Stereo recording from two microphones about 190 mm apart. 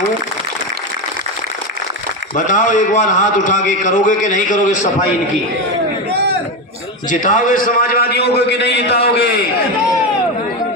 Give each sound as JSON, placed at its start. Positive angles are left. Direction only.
{"t": 2.3, "sound": "a man's voice", "side_deg": 40}
{"t": 7.1, "sound": "a man's voice", "side_deg": 45}